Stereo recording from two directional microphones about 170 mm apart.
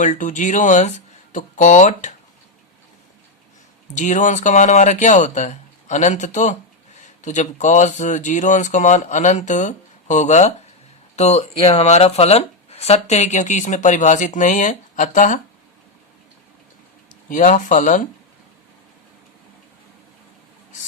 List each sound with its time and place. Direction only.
0.0 s speech: 50° left (ahead or behind)
3.9 s speech: 45° left (ahead or behind)
17.2 s speech: 50° left (ahead or behind)